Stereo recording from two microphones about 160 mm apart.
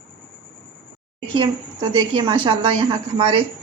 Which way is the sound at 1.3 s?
30° right (ahead or behind).